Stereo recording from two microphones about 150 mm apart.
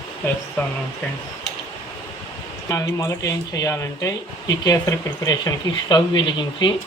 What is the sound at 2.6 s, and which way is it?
Speech, 20° left (ahead or behind).